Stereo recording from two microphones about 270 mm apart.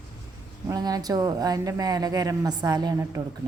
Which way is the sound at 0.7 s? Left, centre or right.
Centre.